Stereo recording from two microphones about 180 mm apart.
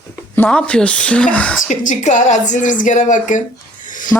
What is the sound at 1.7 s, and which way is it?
Speech, 45° left (ahead or behind).